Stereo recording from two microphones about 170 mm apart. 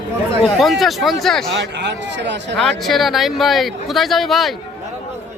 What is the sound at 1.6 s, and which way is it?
A man's voice, 90° right.